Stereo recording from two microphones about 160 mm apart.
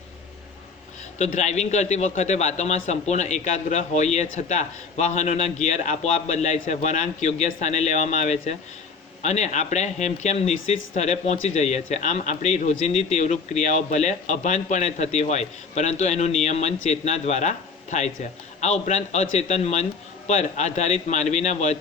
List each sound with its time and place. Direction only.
1.2 s speech: 45° left (ahead or behind)